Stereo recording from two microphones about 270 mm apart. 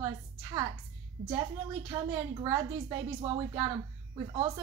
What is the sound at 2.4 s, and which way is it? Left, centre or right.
A woman's voice, centre.